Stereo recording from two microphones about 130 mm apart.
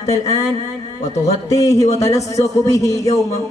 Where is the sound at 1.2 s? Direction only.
25° left (ahead or behind).